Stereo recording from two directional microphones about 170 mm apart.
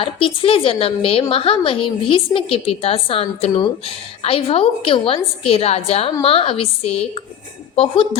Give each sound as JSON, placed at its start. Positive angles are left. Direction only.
{"t": 0.0, "sound": "a woman's voice", "side_deg": 30}